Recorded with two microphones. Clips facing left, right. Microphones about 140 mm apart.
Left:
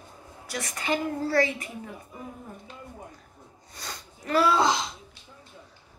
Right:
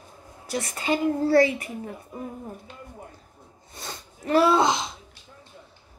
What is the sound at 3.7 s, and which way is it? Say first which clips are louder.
Sneeze: right 2 dB; 25° right (ahead or behind).